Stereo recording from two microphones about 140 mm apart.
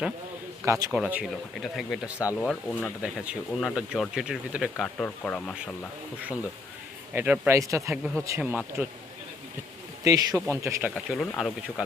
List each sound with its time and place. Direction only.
0.6 s a man's voice: 20° right (ahead or behind)
0.9 s speech: 5° right (ahead or behind); by 2.9 s 10° left (ahead or behind)
3.0 s speech: 5° right (ahead or behind)
4.9 s speech: 10° left (ahead or behind)
7.1 s speech: 15° right (ahead or behind)
10.0 s speech: 25° right (ahead or behind)
10.9 s speech: centre (ahead or behind)